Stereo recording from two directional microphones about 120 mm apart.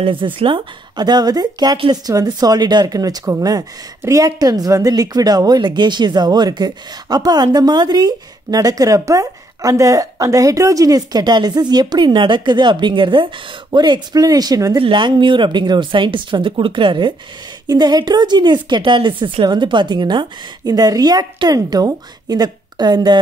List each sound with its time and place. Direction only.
0.0 s speech: 45° right (ahead or behind)
14.8 s speech: 45° right (ahead or behind)